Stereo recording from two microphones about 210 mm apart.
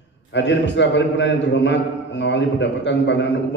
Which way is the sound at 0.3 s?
55° left (ahead or behind).